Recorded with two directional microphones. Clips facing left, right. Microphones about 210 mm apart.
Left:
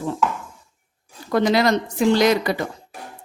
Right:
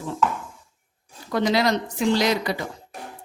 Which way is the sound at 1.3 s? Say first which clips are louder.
Left 3 dB; 55° left (ahead or behind).